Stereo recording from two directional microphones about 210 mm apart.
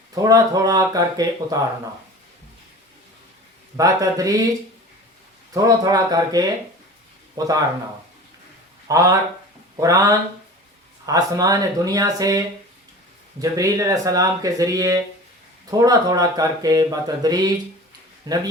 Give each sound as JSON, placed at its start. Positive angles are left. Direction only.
{"t": 0.1, "sound": "speech", "side_deg": -15}
{"t": 3.8, "sound": "speech", "side_deg": -15}
{"t": 5.5, "sound": "speech", "side_deg": -15}
{"t": 8.9, "sound": "speech", "side_deg": -15}
{"t": 13.4, "sound": "a man's voice", "side_deg": -15}